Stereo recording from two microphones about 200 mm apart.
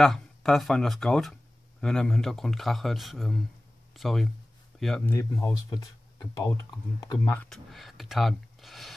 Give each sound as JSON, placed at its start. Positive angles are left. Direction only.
{"t": 0.0, "sound": "speech", "side_deg": 5}
{"t": 7.4, "sound": "speech", "side_deg": 0}